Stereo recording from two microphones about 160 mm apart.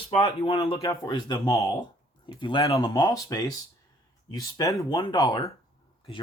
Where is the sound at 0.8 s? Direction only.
20° left (ahead or behind).